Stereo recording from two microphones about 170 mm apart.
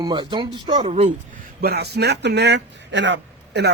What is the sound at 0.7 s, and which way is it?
Speech, 40° right (ahead or behind).